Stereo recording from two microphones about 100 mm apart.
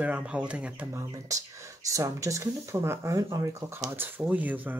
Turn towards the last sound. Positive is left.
turn(degrees=-15)  # may be behind; listen again after turning